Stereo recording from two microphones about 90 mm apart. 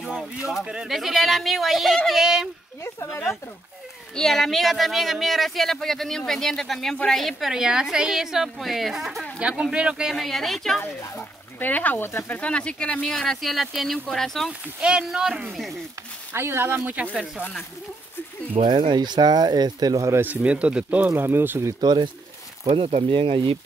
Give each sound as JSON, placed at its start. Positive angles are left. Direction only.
{"t": 0.0, "sound": "a sound", "side_deg": -5}
{"t": 0.7, "sound": "speech", "side_deg": -5}
{"t": 2.8, "sound": "speech", "side_deg": 30}
{"t": 4.1, "sound": "speech", "side_deg": 5}
{"t": 10.1, "sound": "speech", "side_deg": 0}
{"t": 11.1, "sound": "speech", "side_deg": 20}
{"t": 14.8, "sound": "speech", "side_deg": -10}
{"t": 16.3, "sound": "speech", "side_deg": -25}
{"t": 16.9, "sound": "speech", "side_deg": -10}
{"t": 18.5, "sound": "speech", "side_deg": -65}
{"t": 20.1, "sound": "speech", "side_deg": -25}
{"t": 20.4, "sound": "speech", "side_deg": -15}
{"t": 21.8, "sound": "speech", "side_deg": -60}
{"t": 22.7, "sound": "speech", "side_deg": -85}